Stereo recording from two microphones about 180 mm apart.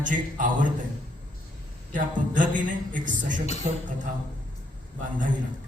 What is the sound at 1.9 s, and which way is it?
A man's voice, 45° right (ahead or behind).